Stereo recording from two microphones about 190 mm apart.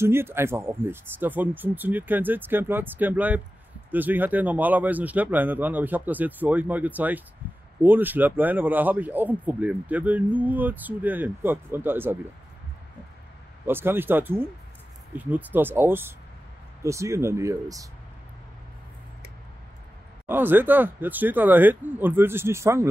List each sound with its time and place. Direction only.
0.0 s speech: 10° right (ahead or behind)
13.7 s speech: 10° right (ahead or behind)
20.2 s speech: 10° right (ahead or behind)